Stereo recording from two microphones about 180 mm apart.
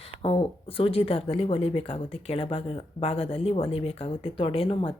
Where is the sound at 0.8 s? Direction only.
30° left (ahead or behind).